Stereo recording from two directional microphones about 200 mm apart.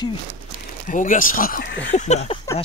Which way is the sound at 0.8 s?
40° left (ahead or behind).